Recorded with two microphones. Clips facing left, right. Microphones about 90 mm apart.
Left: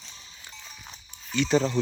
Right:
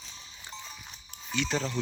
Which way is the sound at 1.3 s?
5° right (ahead or behind).